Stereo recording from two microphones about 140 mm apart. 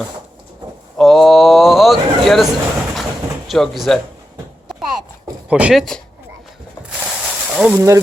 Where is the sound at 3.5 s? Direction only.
Centre (ahead or behind).